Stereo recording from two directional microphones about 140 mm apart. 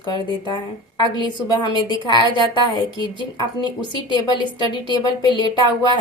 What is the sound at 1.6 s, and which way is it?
Speech, 35° left (ahead or behind).